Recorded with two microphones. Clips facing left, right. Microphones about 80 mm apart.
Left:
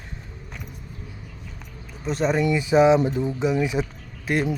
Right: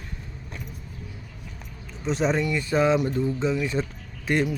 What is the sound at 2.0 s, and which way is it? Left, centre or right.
Speech, centre.